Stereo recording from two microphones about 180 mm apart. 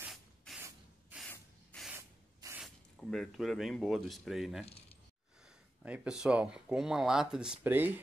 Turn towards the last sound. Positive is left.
turn(degrees=-10)  # may be behind; listen again after turning